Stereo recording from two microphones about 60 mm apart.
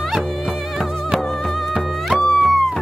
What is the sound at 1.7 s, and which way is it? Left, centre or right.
Music, centre.